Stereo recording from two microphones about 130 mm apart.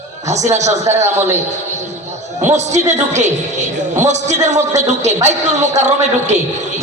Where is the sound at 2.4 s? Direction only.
60° right (ahead or behind).